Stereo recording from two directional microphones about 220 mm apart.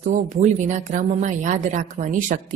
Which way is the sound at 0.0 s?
35° right (ahead or behind).